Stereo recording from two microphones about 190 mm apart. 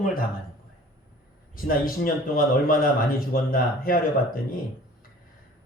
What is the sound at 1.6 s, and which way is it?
A man's voice, 50° left (ahead or behind).